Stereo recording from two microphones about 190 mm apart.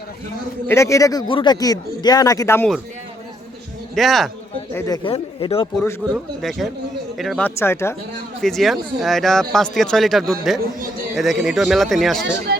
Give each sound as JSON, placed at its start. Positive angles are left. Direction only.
{"t": 0.7, "sound": "speech", "side_deg": 15}
{"t": 3.9, "sound": "speech", "side_deg": 0}
{"t": 4.7, "sound": "speech", "side_deg": 15}
{"t": 5.0, "sound": "speech", "side_deg": 30}
{"t": 6.4, "sound": "speech", "side_deg": 0}
{"t": 8.4, "sound": "speech", "side_deg": 0}
{"t": 12.5, "sound": "music", "side_deg": -60}